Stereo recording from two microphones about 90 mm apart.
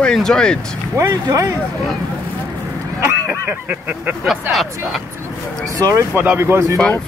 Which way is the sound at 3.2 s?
15° right (ahead or behind).